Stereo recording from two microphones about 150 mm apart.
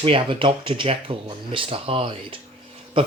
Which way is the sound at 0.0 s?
35° right (ahead or behind).